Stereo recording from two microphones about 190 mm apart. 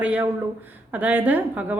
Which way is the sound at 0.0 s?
5° right (ahead or behind).